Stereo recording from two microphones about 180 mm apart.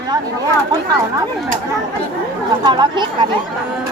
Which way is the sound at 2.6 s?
25° right (ahead or behind).